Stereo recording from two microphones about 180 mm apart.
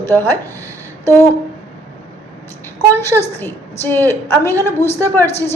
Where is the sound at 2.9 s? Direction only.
15° left (ahead or behind).